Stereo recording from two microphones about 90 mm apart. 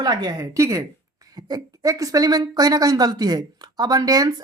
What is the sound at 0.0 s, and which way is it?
A woman's voice, 45° right (ahead or behind).